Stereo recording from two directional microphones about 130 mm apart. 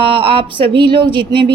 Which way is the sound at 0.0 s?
45° right (ahead or behind).